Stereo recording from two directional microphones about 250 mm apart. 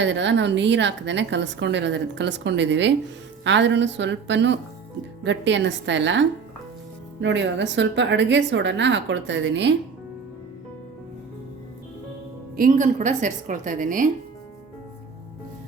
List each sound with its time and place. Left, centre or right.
0.0 s a woman's voice: right
12.5 s a woman's voice: right